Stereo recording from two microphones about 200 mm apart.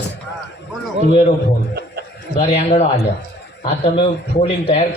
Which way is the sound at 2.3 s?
35° left (ahead or behind).